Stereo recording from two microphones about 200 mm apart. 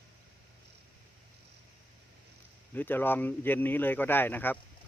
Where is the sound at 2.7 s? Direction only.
10° left (ahead or behind).